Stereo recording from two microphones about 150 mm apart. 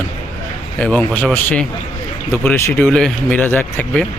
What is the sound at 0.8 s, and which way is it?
Speech, 10° left (ahead or behind).